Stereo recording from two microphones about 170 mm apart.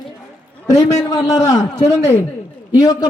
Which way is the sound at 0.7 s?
20° left (ahead or behind).